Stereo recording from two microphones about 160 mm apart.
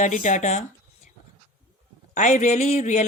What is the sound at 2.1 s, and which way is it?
Speech, 50° left (ahead or behind).